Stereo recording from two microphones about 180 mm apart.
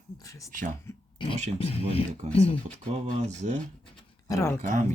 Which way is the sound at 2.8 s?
40° right (ahead or behind).